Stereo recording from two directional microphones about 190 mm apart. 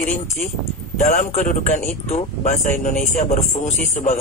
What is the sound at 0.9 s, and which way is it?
A man's voice, 45° left (ahead or behind).